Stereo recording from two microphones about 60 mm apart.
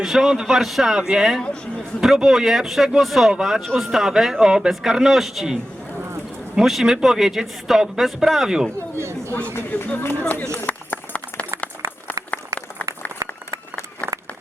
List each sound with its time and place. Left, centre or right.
0.0 s a man's voice: centre
6.6 s a man's voice: centre
9.6 s speech: left
10.7 s a sound: left